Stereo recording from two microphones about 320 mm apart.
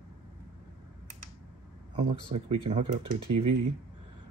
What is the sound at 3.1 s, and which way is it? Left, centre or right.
Speech, right.